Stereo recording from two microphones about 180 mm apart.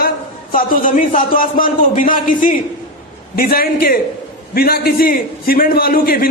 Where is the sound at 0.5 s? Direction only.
50° left (ahead or behind).